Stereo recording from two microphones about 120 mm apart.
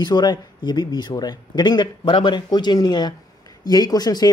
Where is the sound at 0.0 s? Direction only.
35° left (ahead or behind).